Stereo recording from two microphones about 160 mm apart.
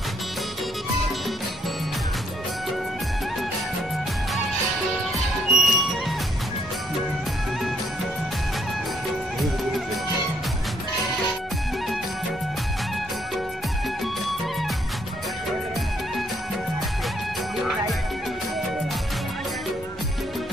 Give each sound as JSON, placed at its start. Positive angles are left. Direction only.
{"t": 5.5, "sound": "music", "side_deg": 0}